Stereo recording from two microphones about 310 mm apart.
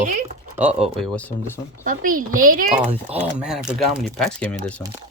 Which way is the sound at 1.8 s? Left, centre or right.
Right.